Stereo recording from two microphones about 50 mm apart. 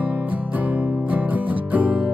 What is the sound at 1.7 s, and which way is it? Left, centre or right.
Music, right.